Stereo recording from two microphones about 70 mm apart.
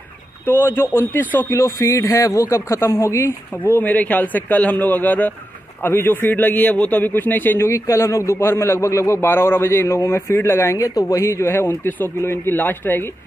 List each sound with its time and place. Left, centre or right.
0.5 s a man's voice: left
1.5 s a man's voice: left
7.7 s a man's voice: left
10.8 s speech: left
11.2 s a man's voice: left